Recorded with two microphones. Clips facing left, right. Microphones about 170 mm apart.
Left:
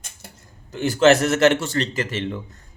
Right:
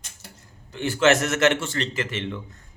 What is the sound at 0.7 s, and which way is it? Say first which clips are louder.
A man's voice: left 4 dB; 40° left (ahead or behind).